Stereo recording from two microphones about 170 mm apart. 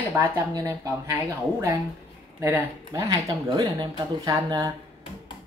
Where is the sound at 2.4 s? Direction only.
15° right (ahead or behind).